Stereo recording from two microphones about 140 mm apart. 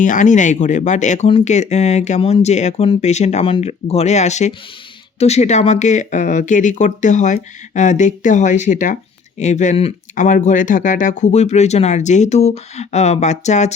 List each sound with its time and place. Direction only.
0.0 s speech: 65° left (ahead or behind)
10.2 s speech: 65° left (ahead or behind)